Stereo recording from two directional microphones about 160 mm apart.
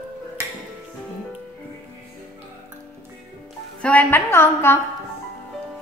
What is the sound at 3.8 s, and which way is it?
Speech, 10° left (ahead or behind).